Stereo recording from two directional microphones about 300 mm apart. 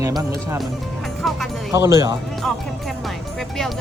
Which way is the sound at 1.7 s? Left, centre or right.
Centre.